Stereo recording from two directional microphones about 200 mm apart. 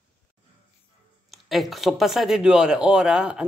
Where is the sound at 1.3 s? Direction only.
Centre (ahead or behind).